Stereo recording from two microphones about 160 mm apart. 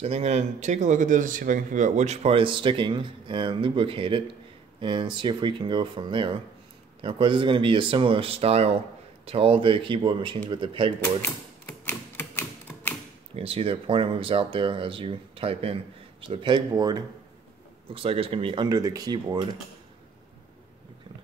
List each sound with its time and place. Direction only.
0.0 s speech: 40° right (ahead or behind)
11.2 s typewriter: 15° left (ahead or behind)
13.4 s speech: 35° right (ahead or behind)